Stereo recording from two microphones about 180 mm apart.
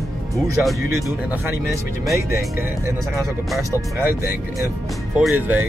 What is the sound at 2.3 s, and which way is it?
Speech, 15° right (ahead or behind).